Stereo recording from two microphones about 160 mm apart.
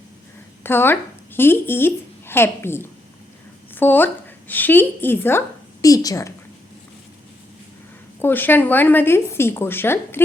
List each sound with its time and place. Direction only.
0.6 s a woman's voice: 15° left (ahead or behind)
8.2 s a woman's voice: 10° left (ahead or behind)